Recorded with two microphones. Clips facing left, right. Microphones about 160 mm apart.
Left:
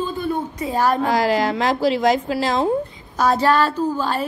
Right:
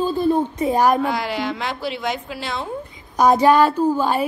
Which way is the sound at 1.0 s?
35° left (ahead or behind).